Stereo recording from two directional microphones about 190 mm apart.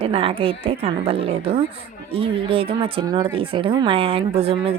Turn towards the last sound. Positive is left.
turn(degrees=-30)  # may be behind; listen again after turning